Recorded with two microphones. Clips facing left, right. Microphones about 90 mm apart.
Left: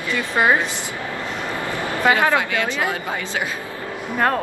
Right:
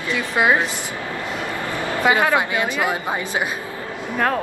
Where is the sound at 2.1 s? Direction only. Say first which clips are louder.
Even; 15° right (ahead or behind).